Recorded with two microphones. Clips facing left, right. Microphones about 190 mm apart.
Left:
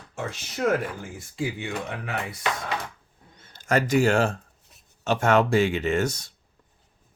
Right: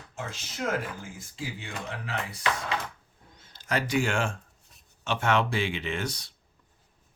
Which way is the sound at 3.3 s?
55° left (ahead or behind).